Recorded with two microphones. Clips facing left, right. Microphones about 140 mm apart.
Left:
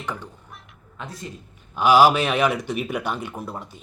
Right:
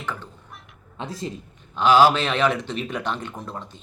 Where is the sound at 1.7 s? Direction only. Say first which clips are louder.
Left 1 dB; 10° left (ahead or behind).